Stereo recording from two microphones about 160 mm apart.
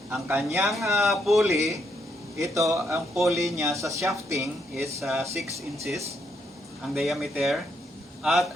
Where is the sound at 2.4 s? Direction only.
20° right (ahead or behind).